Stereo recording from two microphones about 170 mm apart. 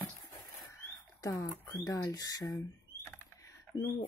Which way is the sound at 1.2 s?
20° left (ahead or behind).